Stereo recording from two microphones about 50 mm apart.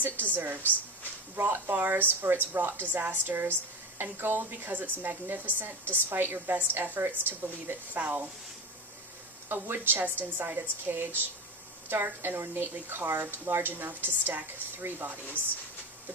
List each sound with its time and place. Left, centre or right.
0.0 s a woman's voice: right
9.5 s a woman's voice: right